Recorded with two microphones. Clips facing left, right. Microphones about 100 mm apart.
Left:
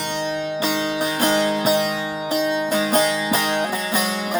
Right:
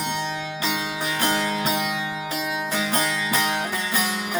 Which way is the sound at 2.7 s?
35° left (ahead or behind).